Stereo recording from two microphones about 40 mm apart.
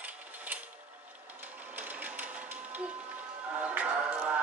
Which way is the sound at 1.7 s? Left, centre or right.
Right.